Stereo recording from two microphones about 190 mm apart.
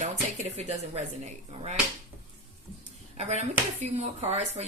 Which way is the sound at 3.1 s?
35° right (ahead or behind).